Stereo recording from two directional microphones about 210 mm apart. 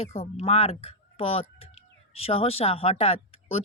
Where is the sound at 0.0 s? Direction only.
30° left (ahead or behind).